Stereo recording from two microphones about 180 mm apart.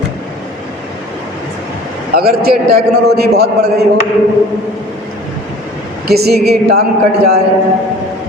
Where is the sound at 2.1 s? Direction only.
60° right (ahead or behind).